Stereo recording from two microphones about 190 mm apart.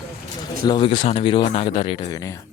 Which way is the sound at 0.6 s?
25° left (ahead or behind).